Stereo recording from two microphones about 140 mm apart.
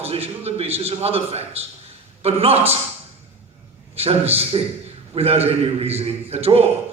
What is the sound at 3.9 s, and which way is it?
A man's voice, 45° right (ahead or behind).